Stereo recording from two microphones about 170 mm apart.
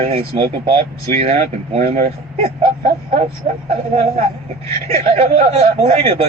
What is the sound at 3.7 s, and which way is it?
Speech, 35° right (ahead or behind).